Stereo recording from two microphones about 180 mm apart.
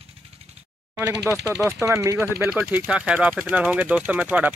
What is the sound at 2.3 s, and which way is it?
Speech, 5° right (ahead or behind).